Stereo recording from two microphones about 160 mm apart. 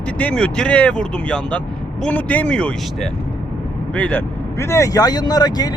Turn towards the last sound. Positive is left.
turn(degrees=25)  # may be behind; listen again after turning